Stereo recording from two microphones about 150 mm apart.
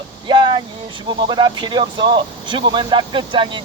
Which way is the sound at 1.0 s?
30° right (ahead or behind).